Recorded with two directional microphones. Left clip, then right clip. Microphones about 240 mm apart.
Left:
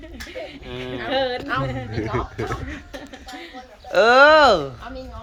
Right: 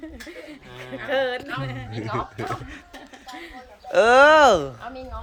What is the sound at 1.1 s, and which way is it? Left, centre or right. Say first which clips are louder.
Speech: left 2 dB; centre.